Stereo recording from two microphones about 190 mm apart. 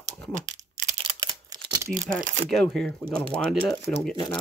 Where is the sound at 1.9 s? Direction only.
45° right (ahead or behind).